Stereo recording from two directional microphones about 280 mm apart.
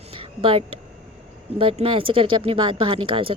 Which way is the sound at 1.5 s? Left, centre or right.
Centre.